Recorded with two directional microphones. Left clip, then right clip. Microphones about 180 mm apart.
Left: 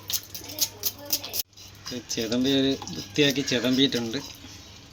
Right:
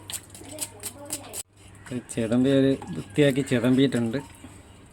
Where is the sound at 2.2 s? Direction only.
45° right (ahead or behind).